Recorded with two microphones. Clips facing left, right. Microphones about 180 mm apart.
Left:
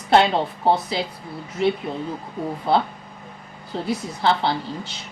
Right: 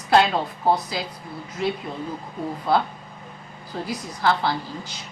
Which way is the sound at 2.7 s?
25° left (ahead or behind).